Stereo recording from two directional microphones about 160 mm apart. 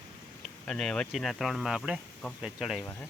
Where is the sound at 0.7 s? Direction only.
5° left (ahead or behind).